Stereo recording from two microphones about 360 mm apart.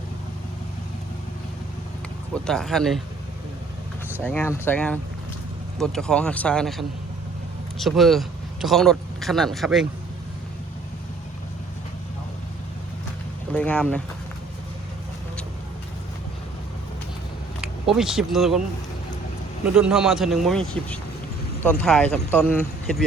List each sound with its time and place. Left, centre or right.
2.3 s speech: centre
4.1 s speech: centre
13.5 s speech: centre
17.6 s speech: centre
19.6 s speech: centre